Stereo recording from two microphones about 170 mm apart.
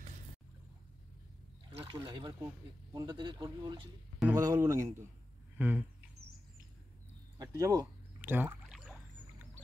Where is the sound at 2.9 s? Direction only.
20° right (ahead or behind).